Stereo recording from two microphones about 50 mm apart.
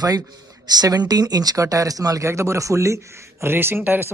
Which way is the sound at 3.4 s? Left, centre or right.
Right.